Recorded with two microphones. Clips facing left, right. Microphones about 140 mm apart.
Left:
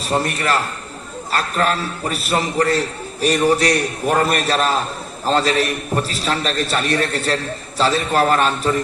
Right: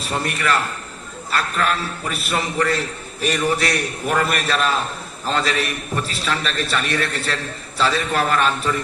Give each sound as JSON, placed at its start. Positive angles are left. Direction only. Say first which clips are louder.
{"t": 0.0, "sound": "a man's voice", "louder": "left 3 dB", "side_deg": 40}